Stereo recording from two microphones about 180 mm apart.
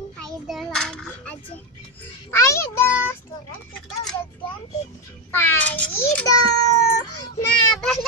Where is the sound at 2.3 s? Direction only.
15° left (ahead or behind).